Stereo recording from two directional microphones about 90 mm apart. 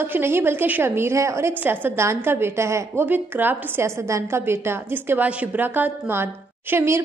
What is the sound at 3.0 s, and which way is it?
A woman's voice, 20° right (ahead or behind).